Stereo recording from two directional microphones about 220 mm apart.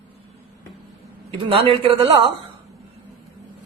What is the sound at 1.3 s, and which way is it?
A man's voice, 25° right (ahead or behind).